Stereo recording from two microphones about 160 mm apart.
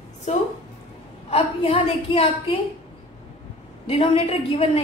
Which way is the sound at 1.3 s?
35° left (ahead or behind).